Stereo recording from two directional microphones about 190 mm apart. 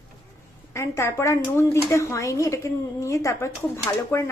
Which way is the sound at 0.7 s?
15° left (ahead or behind).